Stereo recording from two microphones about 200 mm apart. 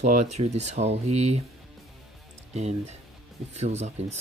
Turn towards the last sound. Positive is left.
turn(degrees=-35)  # may be behind; listen again after turning